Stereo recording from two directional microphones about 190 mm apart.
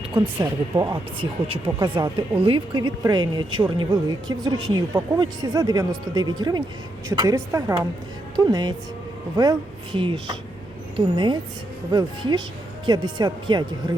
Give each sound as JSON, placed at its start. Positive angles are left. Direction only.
{"t": 0.1, "sound": "a woman's voice", "side_deg": -25}